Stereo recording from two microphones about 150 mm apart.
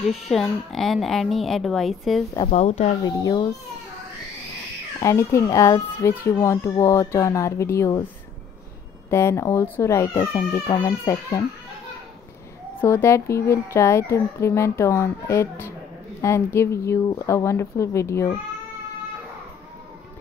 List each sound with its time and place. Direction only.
0.0 s a woman's voice: centre (ahead or behind)
2.5 s speech: 50° left (ahead or behind)
3.1 s a child's voice: 25° left (ahead or behind)
5.0 s a child's voice: 20° left (ahead or behind)
9.1 s a child's voice: 20° left (ahead or behind)
12.8 s a child's voice: 15° left (ahead or behind)